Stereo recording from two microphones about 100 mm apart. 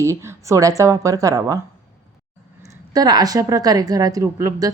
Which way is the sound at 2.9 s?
40° right (ahead or behind).